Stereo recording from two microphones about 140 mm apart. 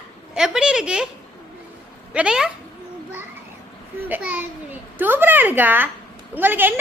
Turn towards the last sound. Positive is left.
turn(degrees=-15)  # may be behind; listen again after turning